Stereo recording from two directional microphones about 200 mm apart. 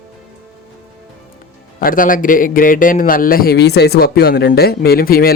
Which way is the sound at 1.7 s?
45° left (ahead or behind).